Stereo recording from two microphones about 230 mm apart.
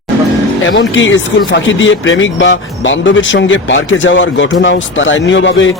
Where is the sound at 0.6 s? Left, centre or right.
Left.